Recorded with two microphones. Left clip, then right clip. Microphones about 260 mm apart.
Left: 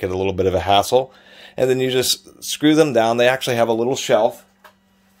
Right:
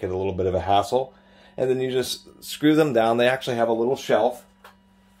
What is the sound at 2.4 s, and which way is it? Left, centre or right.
Speech, left.